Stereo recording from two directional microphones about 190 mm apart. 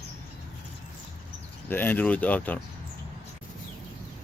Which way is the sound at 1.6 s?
10° left (ahead or behind).